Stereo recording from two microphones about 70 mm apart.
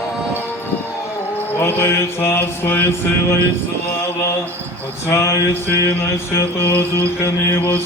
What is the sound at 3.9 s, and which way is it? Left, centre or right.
Mantra, left.